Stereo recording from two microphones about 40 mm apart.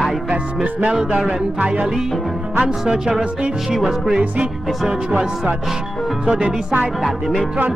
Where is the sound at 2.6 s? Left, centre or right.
Right.